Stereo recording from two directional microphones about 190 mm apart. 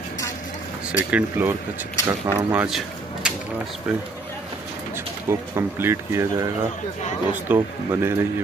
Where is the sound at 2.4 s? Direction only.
10° right (ahead or behind).